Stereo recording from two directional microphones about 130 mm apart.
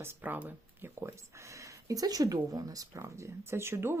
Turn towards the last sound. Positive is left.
turn(degrees=-20)  # may be behind; listen again after turning